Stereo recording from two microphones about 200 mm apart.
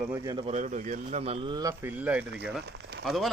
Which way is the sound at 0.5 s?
40° right (ahead or behind).